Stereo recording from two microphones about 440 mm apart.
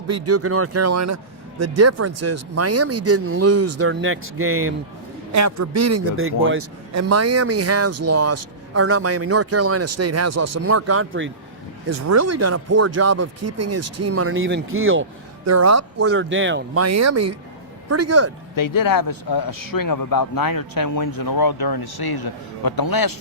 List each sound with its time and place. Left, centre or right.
0.1 s a man's voice: right
11.9 s a man's voice: right
18.5 s a man's voice: left